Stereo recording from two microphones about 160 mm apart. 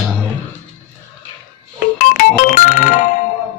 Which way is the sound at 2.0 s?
55° left (ahead or behind).